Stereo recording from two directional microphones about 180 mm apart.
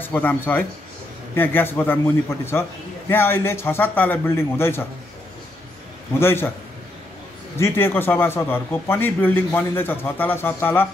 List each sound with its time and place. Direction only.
0.0 s a man's voice: 10° left (ahead or behind)
6.1 s a man's voice: 15° left (ahead or behind)
7.5 s a man's voice: 15° left (ahead or behind)